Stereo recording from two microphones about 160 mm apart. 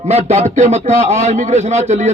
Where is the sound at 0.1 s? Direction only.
40° right (ahead or behind).